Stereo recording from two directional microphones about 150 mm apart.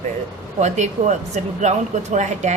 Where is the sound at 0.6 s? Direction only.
50° right (ahead or behind).